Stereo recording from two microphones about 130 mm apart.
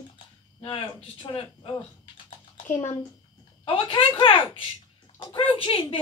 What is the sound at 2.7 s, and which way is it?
Speech, 20° left (ahead or behind).